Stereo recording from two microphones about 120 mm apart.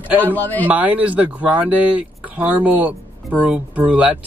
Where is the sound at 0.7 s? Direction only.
15° right (ahead or behind).